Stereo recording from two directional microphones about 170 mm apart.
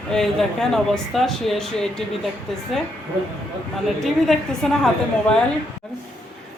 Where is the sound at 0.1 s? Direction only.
5° left (ahead or behind).